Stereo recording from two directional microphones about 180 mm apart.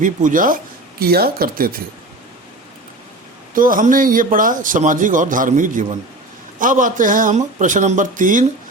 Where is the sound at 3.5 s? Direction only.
50° right (ahead or behind).